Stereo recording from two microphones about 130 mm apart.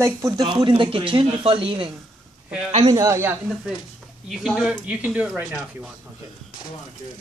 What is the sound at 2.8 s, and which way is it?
Speech, 25° right (ahead or behind).